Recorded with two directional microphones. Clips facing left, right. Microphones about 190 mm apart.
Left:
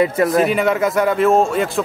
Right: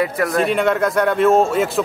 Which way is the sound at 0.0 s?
20° left (ahead or behind).